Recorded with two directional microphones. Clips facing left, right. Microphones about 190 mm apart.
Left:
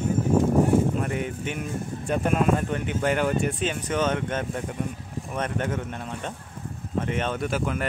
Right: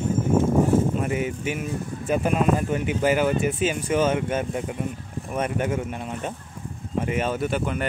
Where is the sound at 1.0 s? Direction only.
5° right (ahead or behind).